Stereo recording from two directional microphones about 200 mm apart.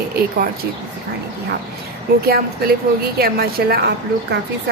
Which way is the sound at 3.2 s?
50° right (ahead or behind).